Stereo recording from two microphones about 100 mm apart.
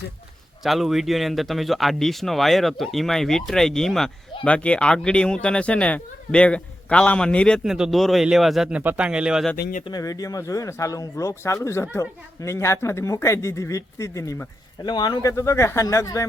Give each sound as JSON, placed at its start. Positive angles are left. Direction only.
{"t": 0.6, "sound": "speech", "side_deg": 0}
{"t": 7.6, "sound": "speech", "side_deg": -5}
{"t": 8.7, "sound": "speech", "side_deg": -15}
{"t": 10.0, "sound": "speech", "side_deg": 35}
{"t": 14.8, "sound": "speech", "side_deg": 45}